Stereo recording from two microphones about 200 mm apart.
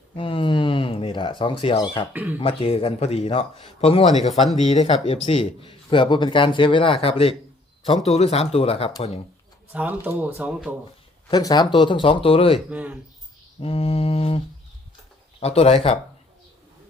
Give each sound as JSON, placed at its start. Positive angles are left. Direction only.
{"t": 0.2, "sound": "cat", "side_deg": 25}
{"t": 2.4, "sound": "a man's voice", "side_deg": 25}
{"t": 9.7, "sound": "speech", "side_deg": -10}
{"t": 11.3, "sound": "a man's voice", "side_deg": 20}
{"t": 12.5, "sound": "speech", "side_deg": -5}
{"t": 13.6, "sound": "a man's voice", "side_deg": 30}